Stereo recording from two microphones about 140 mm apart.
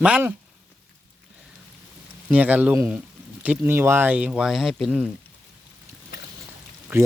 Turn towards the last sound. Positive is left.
turn(degrees=-15)  # may be behind; listen again after turning